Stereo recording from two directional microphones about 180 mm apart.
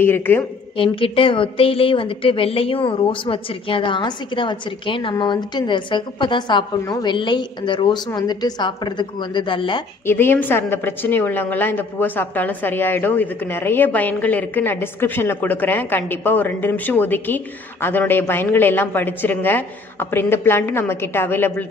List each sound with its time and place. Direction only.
0.0 s a woman's voice: 10° left (ahead or behind)
0.7 s a woman's voice: 30° left (ahead or behind)
10.0 s a woman's voice: 10° left (ahead or behind)